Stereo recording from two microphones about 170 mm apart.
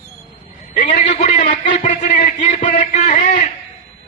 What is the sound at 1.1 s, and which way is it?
Speech, 35° left (ahead or behind).